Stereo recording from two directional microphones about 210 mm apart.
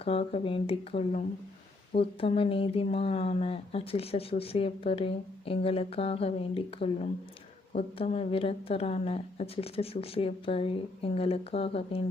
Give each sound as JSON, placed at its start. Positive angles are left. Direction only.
{"t": 0.0, "sound": "speech", "side_deg": 30}